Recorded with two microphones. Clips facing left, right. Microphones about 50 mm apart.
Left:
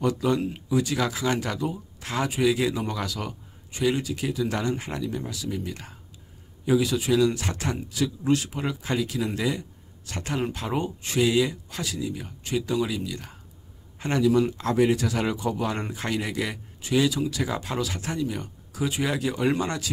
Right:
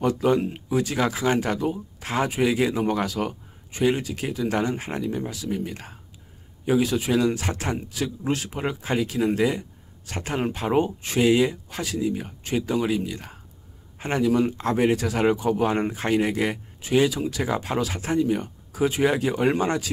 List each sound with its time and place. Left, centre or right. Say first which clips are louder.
0.0 s a man's voice: right 3 dB; right
6.8 s a man's voice: right 2 dB; right